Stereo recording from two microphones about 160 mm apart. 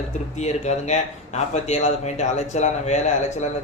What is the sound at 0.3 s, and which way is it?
Speech, 45° left (ahead or behind).